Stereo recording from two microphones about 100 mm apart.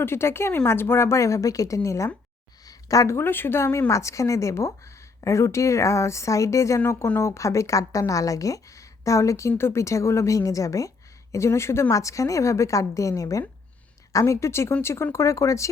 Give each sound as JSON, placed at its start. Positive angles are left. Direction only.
{"t": 0.0, "sound": "a woman's voice", "side_deg": 25}
{"t": 2.6, "sound": "a sound", "side_deg": 35}
{"t": 3.2, "sound": "a woman's voice", "side_deg": 20}